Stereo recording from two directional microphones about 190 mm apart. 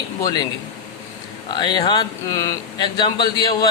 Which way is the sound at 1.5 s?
25° left (ahead or behind).